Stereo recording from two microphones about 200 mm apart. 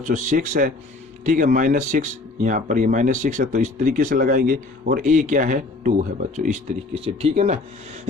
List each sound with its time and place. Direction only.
0.1 s speech: 40° right (ahead or behind)